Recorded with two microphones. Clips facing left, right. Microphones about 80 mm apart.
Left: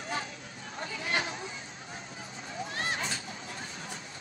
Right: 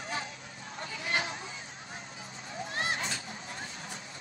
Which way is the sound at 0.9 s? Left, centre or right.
Left.